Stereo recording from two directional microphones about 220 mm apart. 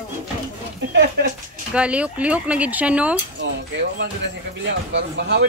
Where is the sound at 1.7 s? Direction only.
5° right (ahead or behind).